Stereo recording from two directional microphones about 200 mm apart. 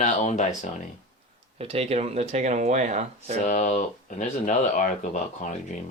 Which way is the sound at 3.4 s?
35° left (ahead or behind).